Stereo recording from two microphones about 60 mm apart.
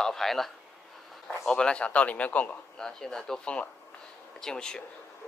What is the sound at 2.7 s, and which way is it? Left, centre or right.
Speech, centre.